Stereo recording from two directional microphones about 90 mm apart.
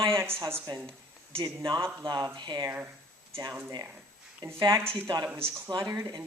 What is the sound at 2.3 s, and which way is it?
Speech, 60° right (ahead or behind).